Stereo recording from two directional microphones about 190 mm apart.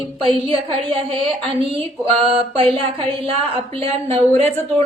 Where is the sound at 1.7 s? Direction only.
30° right (ahead or behind).